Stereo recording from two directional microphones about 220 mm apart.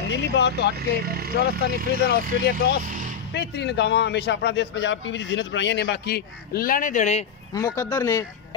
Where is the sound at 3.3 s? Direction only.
50° left (ahead or behind); by 7.2 s 30° left (ahead or behind).